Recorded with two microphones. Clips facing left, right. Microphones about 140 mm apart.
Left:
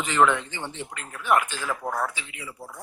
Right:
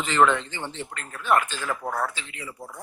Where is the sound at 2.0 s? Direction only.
10° left (ahead or behind).